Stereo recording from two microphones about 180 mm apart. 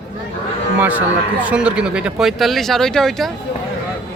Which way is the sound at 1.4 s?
5° right (ahead or behind).